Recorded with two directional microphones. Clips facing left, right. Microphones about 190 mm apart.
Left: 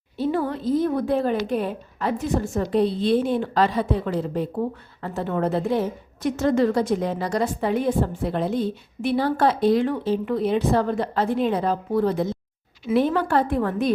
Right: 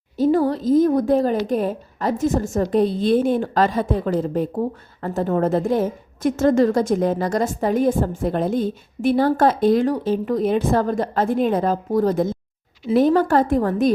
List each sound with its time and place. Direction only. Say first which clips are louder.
0.2 s a woman's voice: right 6 dB; 40° right (ahead or behind)